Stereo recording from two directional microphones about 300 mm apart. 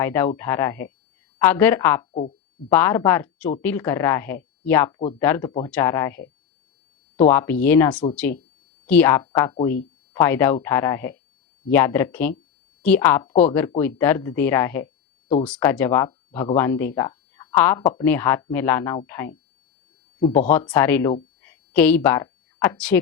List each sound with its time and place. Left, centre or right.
0.0 s speech: centre
7.3 s a woman's voice: centre
15.3 s speech: centre
15.5 s speech: centre
20.5 s speech: centre